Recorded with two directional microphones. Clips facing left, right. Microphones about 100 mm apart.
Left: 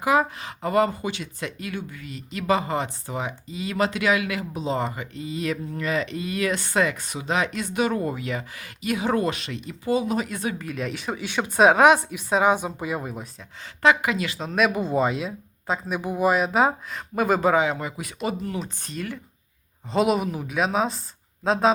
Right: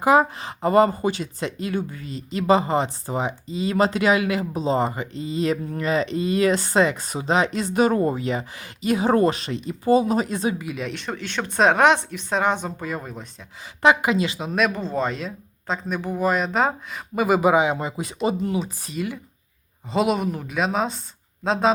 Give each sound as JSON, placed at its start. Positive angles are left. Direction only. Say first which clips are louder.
{"t": 0.0, "sound": "speech", "louder": "right 4 dB", "side_deg": -35}
{"t": 10.5, "sound": "speech", "louder": "right 1 dB", "side_deg": -5}
{"t": 13.8, "sound": "speech", "louder": "right 2 dB", "side_deg": -25}
{"t": 14.3, "sound": "speech", "louder": "even", "side_deg": -5}
{"t": 14.7, "sound": "speech", "louder": "left 2 dB", "side_deg": 15}
{"t": 18.6, "sound": "speech", "louder": "right 4 dB", "side_deg": -5}